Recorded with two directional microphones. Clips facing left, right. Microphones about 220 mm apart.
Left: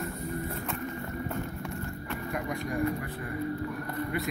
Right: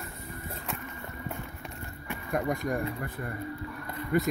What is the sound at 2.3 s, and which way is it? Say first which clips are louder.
Speech: right 5 dB; 45° right (ahead or behind).